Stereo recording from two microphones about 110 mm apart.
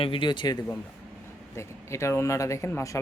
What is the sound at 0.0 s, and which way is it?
Speech, 50° left (ahead or behind).